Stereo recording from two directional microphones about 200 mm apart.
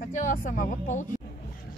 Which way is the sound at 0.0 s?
40° left (ahead or behind).